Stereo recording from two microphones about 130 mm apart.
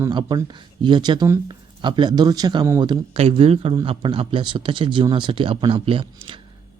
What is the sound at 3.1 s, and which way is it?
Speech, 50° right (ahead or behind).